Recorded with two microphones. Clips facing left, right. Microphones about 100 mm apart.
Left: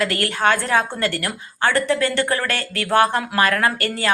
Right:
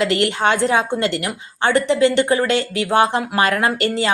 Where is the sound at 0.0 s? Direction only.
20° right (ahead or behind).